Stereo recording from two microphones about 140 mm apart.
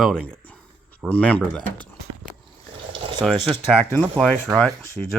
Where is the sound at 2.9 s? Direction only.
40° right (ahead or behind).